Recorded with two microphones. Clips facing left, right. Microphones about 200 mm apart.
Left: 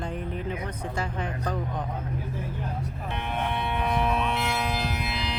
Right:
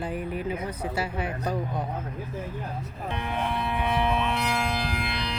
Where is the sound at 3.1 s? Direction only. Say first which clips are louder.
Right 1 dB; 5° left (ahead or behind).